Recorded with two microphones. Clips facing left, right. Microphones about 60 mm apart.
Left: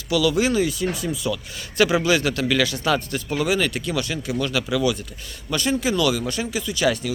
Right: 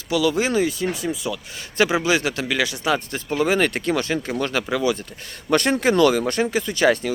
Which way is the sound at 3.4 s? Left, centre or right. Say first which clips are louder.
Right 3 dB; right.